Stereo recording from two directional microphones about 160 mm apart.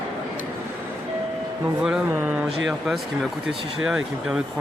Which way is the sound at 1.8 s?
5° right (ahead or behind).